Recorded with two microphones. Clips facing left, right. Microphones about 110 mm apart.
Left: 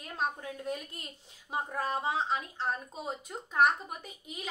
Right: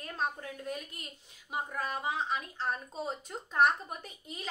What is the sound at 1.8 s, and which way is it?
Speech, 30° left (ahead or behind).